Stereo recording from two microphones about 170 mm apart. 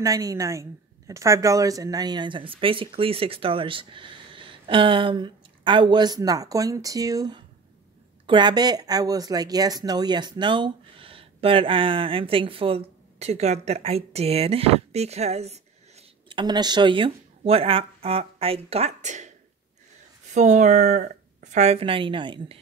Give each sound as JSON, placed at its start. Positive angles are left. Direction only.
{"t": 0.0, "sound": "a woman's voice", "side_deg": -20}
{"t": 16.3, "sound": "speech", "side_deg": -25}
{"t": 20.3, "sound": "speech", "side_deg": -45}